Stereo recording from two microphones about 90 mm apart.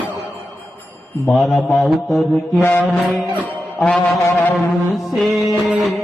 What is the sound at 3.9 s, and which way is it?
Speech, centre (ahead or behind).